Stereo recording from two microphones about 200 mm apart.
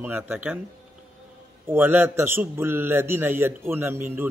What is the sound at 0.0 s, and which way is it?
Speech, 10° right (ahead or behind).